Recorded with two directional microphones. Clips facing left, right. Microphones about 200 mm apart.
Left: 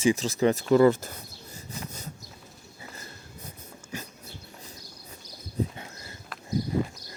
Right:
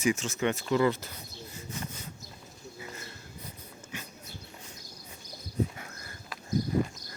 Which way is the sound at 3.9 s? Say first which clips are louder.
Left 5 dB; 40° left (ahead or behind).